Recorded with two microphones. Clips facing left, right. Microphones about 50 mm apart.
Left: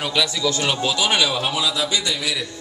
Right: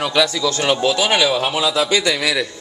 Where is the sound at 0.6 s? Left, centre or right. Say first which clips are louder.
Right 8 dB; right.